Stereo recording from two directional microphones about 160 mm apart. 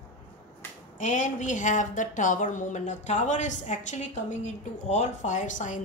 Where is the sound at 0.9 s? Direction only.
50° left (ahead or behind).